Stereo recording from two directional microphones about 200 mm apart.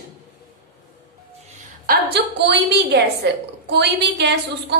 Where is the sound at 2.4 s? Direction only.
60° right (ahead or behind).